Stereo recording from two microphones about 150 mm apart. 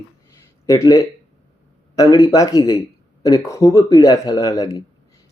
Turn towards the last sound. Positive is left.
turn(degrees=25)  # may be behind; listen again after turning